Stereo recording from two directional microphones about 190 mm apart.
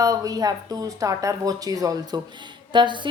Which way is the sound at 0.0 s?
20° right (ahead or behind).